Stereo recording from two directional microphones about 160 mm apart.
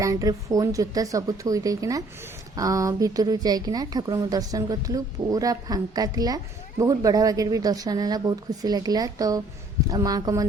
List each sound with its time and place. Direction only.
0.0 s a woman's voice: 20° right (ahead or behind)